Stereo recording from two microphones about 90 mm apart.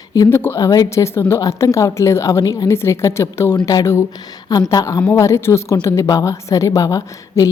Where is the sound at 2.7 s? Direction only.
30° left (ahead or behind).